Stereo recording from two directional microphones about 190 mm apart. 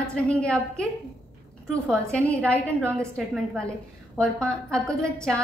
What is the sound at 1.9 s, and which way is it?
Speech, 5° left (ahead or behind).